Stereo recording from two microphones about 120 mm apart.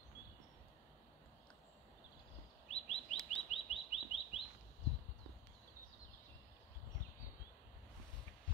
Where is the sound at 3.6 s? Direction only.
55° left (ahead or behind).